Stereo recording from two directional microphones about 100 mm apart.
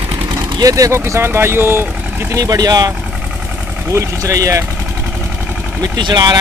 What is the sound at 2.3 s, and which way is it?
Speech, 35° right (ahead or behind).